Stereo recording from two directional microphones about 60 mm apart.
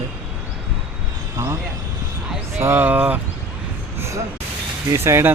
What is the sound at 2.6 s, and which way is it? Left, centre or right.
Speech, right.